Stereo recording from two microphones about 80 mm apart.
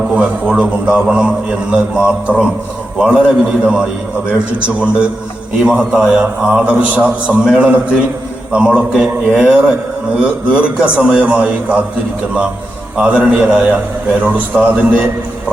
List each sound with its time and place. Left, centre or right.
0.5 s a man's voice: centre
13.0 s a man's voice: centre